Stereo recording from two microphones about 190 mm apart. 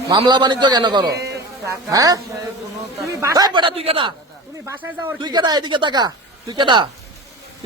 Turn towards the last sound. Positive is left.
turn(degrees=-25)  # may be behind; listen again after turning